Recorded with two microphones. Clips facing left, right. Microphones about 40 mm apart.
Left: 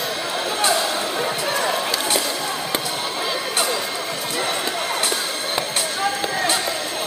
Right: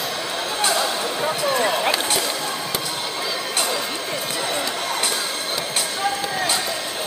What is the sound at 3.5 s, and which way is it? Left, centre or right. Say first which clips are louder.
Music: left 1 dB; centre.